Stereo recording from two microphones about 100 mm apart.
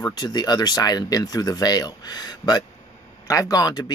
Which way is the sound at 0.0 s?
40° left (ahead or behind).